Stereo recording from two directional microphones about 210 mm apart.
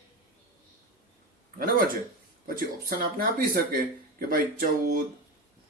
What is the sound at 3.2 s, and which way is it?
Speech, 45° right (ahead or behind).